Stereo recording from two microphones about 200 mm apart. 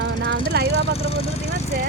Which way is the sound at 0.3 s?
55° right (ahead or behind).